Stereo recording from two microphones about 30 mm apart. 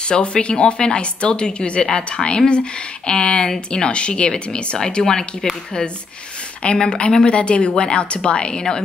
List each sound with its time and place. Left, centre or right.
0.1 s speech: left
6.6 s speech: left
7.1 s speech: left
7.3 s speech: left